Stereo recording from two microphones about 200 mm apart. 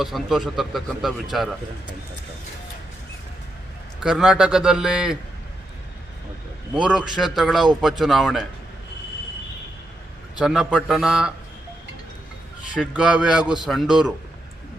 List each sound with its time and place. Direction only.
0.0 s a man's voice: centre (ahead or behind)
4.0 s a man's voice: 5° right (ahead or behind)
6.8 s a man's voice: 5° right (ahead or behind)
10.3 s a man's voice: 5° right (ahead or behind)
12.7 s a man's voice: 5° right (ahead or behind)